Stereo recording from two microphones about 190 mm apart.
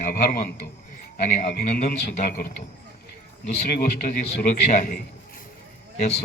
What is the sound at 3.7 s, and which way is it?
A man's voice, 45° left (ahead or behind).